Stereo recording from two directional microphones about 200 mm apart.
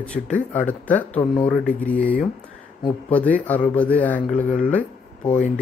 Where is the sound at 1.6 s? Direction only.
40° left (ahead or behind).